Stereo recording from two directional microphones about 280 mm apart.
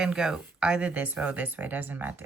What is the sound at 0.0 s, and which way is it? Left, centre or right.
Speech, centre.